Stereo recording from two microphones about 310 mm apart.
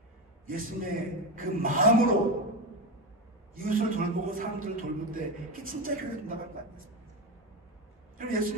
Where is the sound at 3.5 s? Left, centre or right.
Right.